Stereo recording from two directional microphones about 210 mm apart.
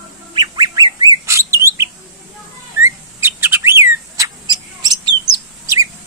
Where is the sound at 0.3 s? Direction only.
20° right (ahead or behind).